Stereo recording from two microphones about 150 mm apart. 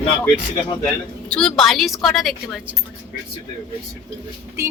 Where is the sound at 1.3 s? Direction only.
5° left (ahead or behind).